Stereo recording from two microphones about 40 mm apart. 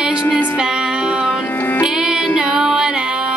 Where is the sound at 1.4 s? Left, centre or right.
Left.